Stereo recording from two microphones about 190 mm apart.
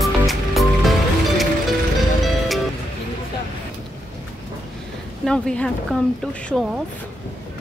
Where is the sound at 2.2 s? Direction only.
Centre (ahead or behind).